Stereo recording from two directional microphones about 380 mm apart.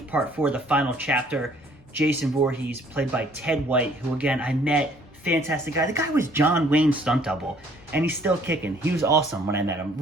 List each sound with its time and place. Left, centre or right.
0.1 s speech: centre